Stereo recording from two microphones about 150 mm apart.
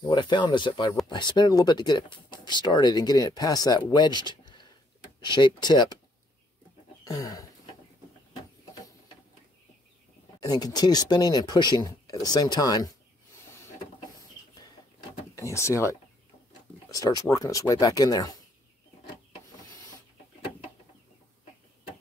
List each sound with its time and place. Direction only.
0.0 s speech: 30° left (ahead or behind)
7.1 s speech: 25° left (ahead or behind)
10.4 s speech: 25° left (ahead or behind)
15.3 s speech: 20° left (ahead or behind)